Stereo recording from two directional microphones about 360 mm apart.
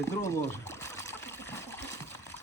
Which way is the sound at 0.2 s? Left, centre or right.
Centre.